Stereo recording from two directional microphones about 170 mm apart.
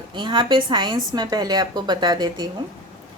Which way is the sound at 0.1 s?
25° right (ahead or behind).